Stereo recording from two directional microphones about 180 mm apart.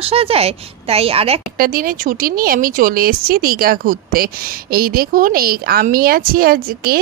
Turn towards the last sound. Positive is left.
turn(degrees=-55)  # may be behind; listen again after turning